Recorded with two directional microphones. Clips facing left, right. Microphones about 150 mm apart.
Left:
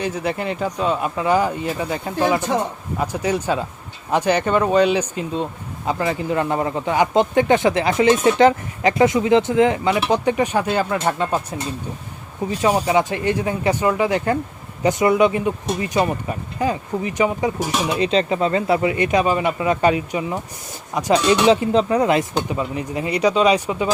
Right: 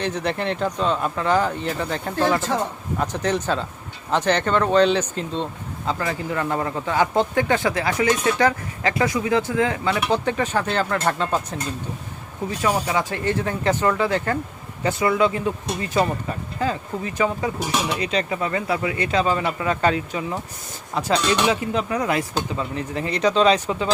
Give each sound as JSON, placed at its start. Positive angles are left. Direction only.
{"t": 0.0, "sound": "speech", "side_deg": 5}
{"t": 12.5, "sound": "speech", "side_deg": 20}
{"t": 21.4, "sound": "speech", "side_deg": 25}